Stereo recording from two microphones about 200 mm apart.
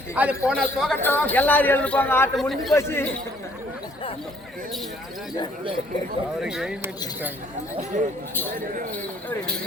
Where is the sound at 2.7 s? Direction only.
10° left (ahead or behind).